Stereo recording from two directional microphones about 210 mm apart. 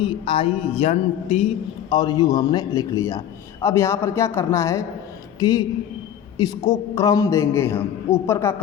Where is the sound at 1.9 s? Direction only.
20° left (ahead or behind).